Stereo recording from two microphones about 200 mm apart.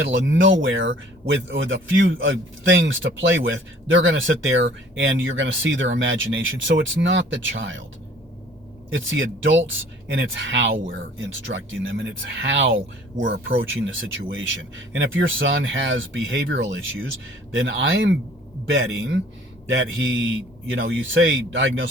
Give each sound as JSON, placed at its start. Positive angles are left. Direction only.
{"t": 0.0, "sound": "speech", "side_deg": -65}
{"t": 8.9, "sound": "speech", "side_deg": -70}